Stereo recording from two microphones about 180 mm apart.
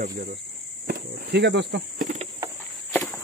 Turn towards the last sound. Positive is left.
turn(degrees=10)  # may be behind; listen again after turning